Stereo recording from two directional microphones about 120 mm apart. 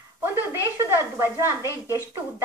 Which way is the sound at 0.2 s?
20° right (ahead or behind).